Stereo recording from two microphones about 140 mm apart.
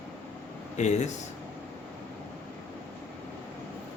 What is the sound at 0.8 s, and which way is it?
Speech, 55° left (ahead or behind).